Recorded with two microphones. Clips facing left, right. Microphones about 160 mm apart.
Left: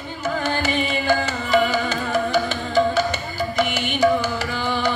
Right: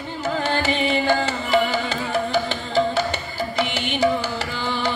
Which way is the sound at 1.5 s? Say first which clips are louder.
Left 2 dB; 45° left (ahead or behind).